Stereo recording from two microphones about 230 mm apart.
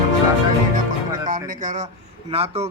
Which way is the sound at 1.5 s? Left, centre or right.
Right.